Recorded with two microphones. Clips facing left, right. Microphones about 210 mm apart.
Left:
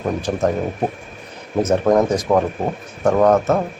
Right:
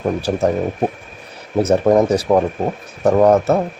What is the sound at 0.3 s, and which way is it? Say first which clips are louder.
Speech: right 3 dB; 25° right (ahead or behind).